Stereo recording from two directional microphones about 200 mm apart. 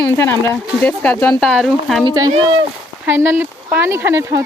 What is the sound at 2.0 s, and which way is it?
Speech, 20° right (ahead or behind).